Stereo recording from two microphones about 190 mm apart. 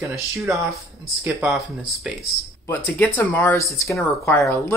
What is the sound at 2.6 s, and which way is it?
Speech, 10° left (ahead or behind).